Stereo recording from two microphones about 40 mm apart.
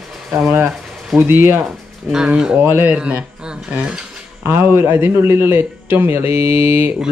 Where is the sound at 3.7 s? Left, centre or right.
Right.